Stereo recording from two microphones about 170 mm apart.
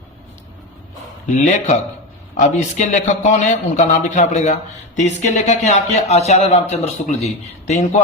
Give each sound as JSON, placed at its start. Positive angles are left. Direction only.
{"t": 1.3, "sound": "a man's voice", "side_deg": 45}